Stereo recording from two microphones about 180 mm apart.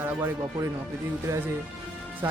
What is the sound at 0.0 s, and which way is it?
Speech, 15° right (ahead or behind).